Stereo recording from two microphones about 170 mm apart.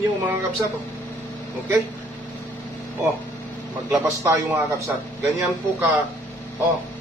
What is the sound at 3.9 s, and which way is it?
Speech, 20° right (ahead or behind).